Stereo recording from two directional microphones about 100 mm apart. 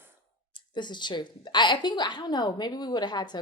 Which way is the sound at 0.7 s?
50° left (ahead or behind).